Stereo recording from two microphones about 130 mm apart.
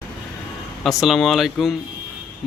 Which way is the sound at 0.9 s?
Centre (ahead or behind).